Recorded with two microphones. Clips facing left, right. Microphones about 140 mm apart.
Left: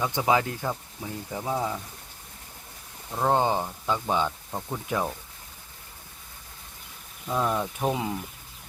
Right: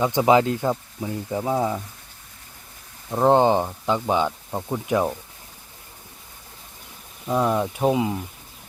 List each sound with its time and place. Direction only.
0.0 s speech: 20° right (ahead or behind)
3.1 s speech: 25° right (ahead or behind)
7.3 s speech: 15° right (ahead or behind)